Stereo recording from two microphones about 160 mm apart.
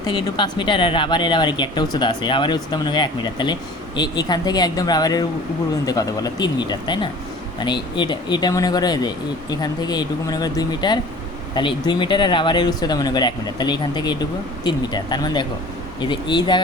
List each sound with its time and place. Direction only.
0.1 s speech: 30° left (ahead or behind)